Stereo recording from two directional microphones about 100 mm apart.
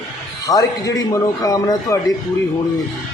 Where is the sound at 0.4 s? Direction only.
35° left (ahead or behind).